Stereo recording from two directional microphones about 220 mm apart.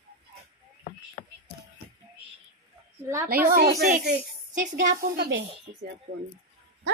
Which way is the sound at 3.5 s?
45° right (ahead or behind).